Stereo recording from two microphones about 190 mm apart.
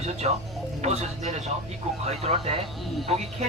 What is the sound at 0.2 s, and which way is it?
Speech, 35° right (ahead or behind).